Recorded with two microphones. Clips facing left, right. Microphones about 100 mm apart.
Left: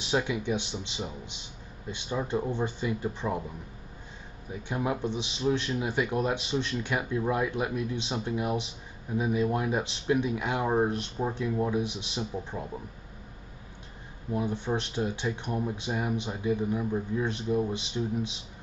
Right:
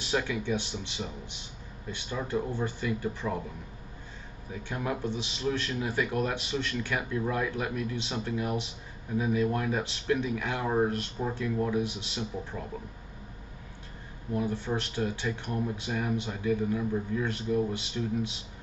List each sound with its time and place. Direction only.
0.0 s speech: 20° left (ahead or behind)
4.6 s speech: 20° left (ahead or behind)
14.3 s speech: 20° left (ahead or behind)